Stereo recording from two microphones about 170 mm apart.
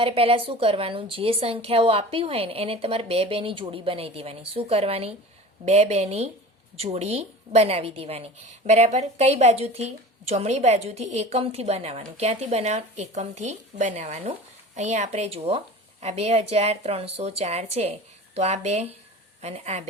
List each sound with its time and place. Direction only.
0.0 s a woman's voice: 35° right (ahead or behind)